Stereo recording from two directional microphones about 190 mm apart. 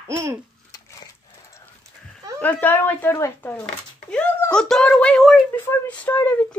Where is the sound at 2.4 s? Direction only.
10° left (ahead or behind).